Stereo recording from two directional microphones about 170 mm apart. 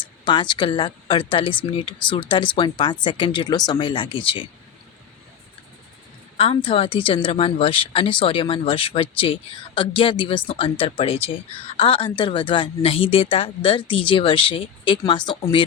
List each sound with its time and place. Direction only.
0.0 s a woman's voice: 30° left (ahead or behind)
6.3 s a woman's voice: 35° left (ahead or behind)